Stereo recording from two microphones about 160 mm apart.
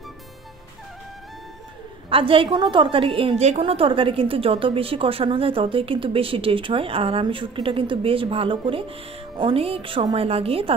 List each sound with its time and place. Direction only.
2.0 s a woman's voice: 35° right (ahead or behind)